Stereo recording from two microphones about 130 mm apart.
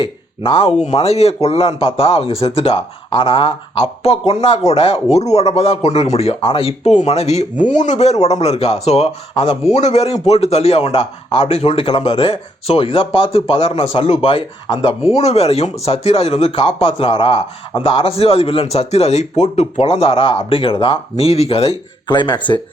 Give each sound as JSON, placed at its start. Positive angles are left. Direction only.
{"t": 0.0, "sound": "speech", "side_deg": 40}
{"t": 0.8, "sound": "speech", "side_deg": 55}
{"t": 7.7, "sound": "speech", "side_deg": 65}
{"t": 9.7, "sound": "speech", "side_deg": 60}
{"t": 15.0, "sound": "speech", "side_deg": 55}
{"t": 22.0, "sound": "speech", "side_deg": 35}